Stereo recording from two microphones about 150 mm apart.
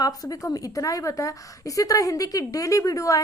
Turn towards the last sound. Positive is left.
turn(degrees=20)  # may be behind; listen again after turning